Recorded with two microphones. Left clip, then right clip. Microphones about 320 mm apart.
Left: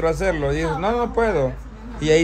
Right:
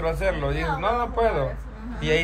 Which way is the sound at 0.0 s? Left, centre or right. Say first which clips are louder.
Left 4 dB; left.